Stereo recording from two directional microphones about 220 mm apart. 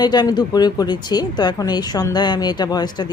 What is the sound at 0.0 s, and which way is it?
Speech, 20° left (ahead or behind).